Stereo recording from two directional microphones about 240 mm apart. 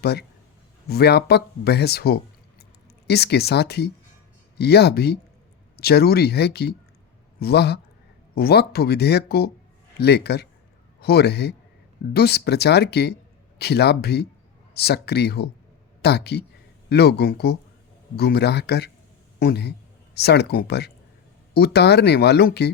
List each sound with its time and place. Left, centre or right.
0.0 s a man's voice: left